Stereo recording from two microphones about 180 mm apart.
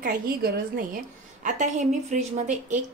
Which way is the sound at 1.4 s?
45° right (ahead or behind).